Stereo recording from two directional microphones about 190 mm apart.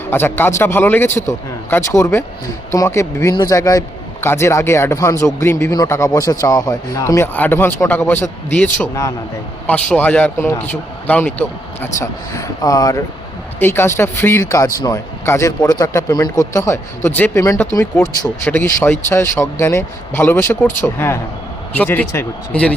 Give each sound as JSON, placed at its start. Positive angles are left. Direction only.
{"t": 0.1, "sound": "speech", "side_deg": 10}